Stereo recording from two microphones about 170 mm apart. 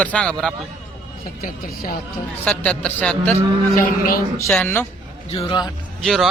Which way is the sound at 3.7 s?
55° left (ahead or behind).